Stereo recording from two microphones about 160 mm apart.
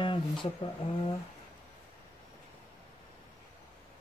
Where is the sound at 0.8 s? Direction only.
35° left (ahead or behind).